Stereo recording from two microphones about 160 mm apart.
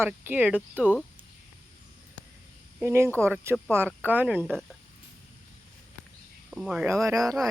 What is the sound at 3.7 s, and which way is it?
Speech, 15° right (ahead or behind).